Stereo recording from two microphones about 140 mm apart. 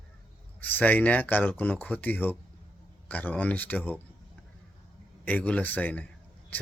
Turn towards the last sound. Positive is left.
turn(degrees=10)  # may be behind; listen again after turning